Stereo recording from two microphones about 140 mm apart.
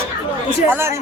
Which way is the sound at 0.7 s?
15° right (ahead or behind).